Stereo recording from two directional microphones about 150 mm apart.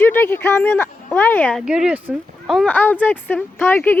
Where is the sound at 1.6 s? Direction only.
5° right (ahead or behind); by 4.0 s 15° left (ahead or behind).